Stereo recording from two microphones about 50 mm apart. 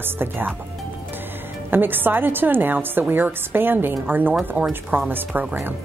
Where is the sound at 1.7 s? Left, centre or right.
Right.